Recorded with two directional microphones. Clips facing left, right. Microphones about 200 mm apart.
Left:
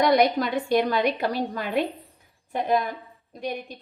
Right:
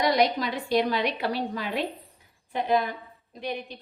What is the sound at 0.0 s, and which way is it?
A woman's voice, 50° left (ahead or behind).